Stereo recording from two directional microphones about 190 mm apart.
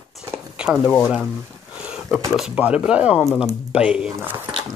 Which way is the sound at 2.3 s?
5° right (ahead or behind).